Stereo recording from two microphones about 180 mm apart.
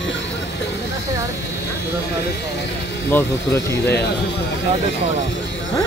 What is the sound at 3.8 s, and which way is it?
Speech, 65° left (ahead or behind).